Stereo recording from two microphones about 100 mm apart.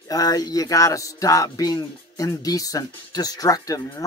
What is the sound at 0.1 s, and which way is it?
Speech, 40° left (ahead or behind).